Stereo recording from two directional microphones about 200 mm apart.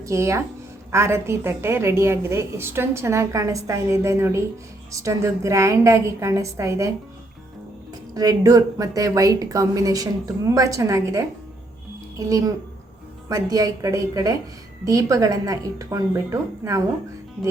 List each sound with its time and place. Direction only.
0.0 s a woman's voice: 15° right (ahead or behind)
8.1 s a woman's voice: 20° right (ahead or behind)